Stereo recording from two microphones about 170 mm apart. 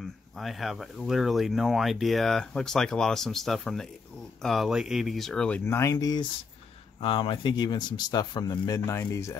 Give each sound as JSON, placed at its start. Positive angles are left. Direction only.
{"t": 0.0, "sound": "speech", "side_deg": 0}